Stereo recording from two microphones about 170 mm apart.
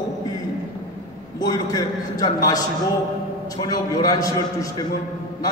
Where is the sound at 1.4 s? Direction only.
20° left (ahead or behind).